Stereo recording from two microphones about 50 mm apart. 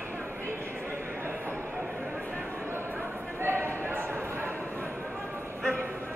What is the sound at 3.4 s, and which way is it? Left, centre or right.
Basketball bounce, right.